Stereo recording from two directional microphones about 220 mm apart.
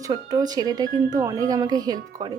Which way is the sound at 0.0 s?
15° right (ahead or behind).